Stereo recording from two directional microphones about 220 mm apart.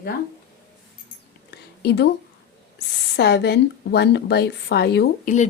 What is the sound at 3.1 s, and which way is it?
Speech, 50° left (ahead or behind).